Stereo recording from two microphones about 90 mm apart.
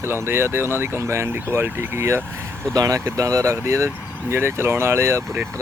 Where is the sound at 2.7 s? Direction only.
45° right (ahead or behind).